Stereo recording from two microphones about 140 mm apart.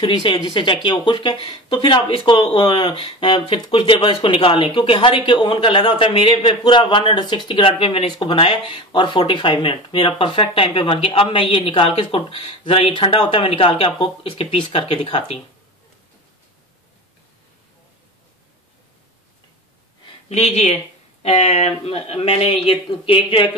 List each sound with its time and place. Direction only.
0.0 s speech: 35° left (ahead or behind)
20.2 s speech: 50° left (ahead or behind)